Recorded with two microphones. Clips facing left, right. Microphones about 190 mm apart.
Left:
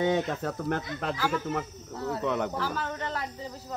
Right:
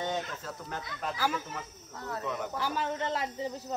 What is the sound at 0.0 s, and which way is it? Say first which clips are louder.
Speech: left 8 dB; 60° left (ahead or behind).